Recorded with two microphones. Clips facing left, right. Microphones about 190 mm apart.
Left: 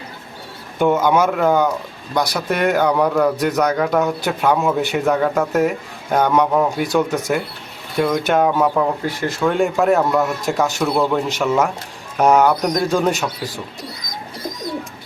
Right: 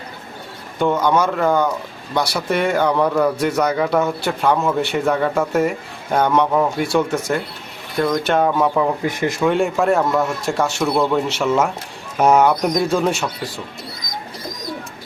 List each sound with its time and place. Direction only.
0.8 s speech: 5° left (ahead or behind)
9.0 s speech: 20° right (ahead or behind)
9.4 s speech: centre (ahead or behind)